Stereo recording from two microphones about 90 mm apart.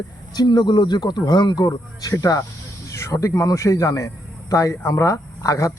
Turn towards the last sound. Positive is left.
turn(degrees=40)  # may be behind; listen again after turning